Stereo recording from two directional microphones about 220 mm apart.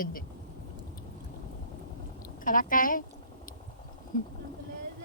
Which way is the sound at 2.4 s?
40° left (ahead or behind).